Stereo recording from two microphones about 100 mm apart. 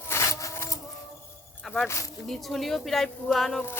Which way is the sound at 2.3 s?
Centre (ahead or behind).